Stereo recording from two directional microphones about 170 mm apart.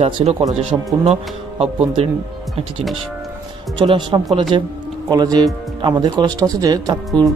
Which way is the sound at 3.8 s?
25° right (ahead or behind).